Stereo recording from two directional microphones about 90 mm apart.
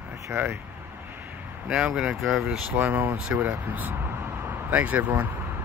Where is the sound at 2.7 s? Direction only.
20° right (ahead or behind).